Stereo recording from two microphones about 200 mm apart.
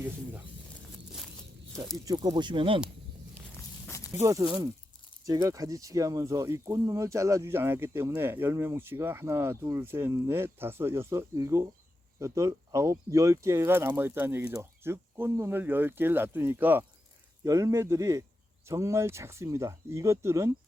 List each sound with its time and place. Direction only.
2.0 s speech: 20° right (ahead or behind)
3.8 s walk: 15° left (ahead or behind)
4.1 s speech: 15° right (ahead or behind)